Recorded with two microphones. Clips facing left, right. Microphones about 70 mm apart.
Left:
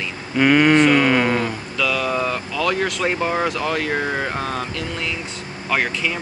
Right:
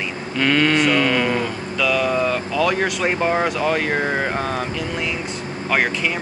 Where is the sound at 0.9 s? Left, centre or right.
Centre.